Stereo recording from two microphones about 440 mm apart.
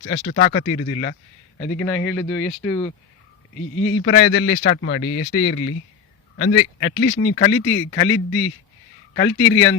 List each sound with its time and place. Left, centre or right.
0.0 s a man's voice: left
1.5 s speech: centre
3.8 s a man's voice: left